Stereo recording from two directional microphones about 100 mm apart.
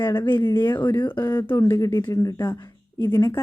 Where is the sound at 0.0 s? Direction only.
20° left (ahead or behind).